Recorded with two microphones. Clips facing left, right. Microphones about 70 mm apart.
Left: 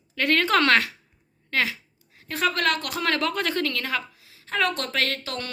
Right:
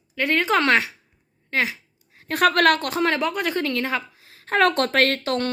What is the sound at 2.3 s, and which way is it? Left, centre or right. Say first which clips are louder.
Speech: right 7 dB; right.